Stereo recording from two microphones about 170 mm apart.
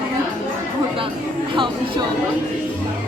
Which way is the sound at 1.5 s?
25° right (ahead or behind).